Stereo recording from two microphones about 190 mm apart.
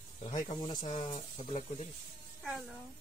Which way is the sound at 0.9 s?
40° left (ahead or behind).